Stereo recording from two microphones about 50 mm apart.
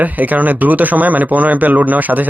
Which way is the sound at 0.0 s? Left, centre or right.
Right.